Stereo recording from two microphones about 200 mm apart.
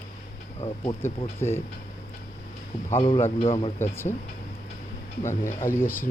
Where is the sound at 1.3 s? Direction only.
10° left (ahead or behind).